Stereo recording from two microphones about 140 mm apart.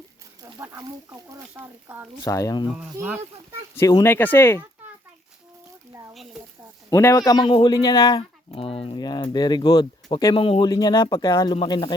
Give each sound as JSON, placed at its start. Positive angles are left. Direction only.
{"t": 0.4, "sound": "speech", "side_deg": -20}
{"t": 2.2, "sound": "a man's voice", "side_deg": 25}
{"t": 2.7, "sound": "speech", "side_deg": -5}
{"t": 3.8, "sound": "speech", "side_deg": 20}
{"t": 6.9, "sound": "a man's voice", "side_deg": 20}
{"t": 7.4, "sound": "speech", "side_deg": 40}
{"t": 7.7, "sound": "speech", "side_deg": 25}
{"t": 9.0, "sound": "speech", "side_deg": 30}
{"t": 10.3, "sound": "speech", "side_deg": 40}
{"t": 10.7, "sound": "speech", "side_deg": 30}